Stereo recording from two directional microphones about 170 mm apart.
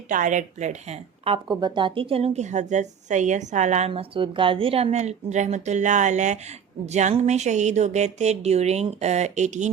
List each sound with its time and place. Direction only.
0.1 s speech: 50° right (ahead or behind)